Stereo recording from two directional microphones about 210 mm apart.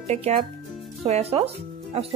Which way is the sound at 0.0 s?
30° right (ahead or behind).